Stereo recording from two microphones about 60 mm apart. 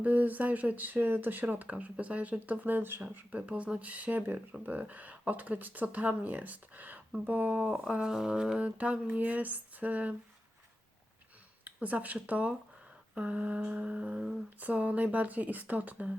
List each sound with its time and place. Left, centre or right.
0.0 s speech: right
11.6 s speech: right